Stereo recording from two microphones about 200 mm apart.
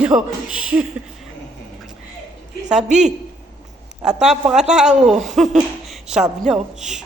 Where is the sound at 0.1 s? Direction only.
20° right (ahead or behind).